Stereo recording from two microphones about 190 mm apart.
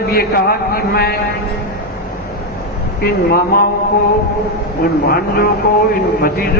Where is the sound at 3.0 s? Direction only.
55° left (ahead or behind).